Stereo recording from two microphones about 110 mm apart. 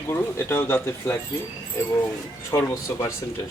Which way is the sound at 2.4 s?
25° left (ahead or behind).